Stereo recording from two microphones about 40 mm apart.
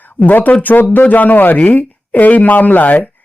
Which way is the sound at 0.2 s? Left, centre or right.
Left.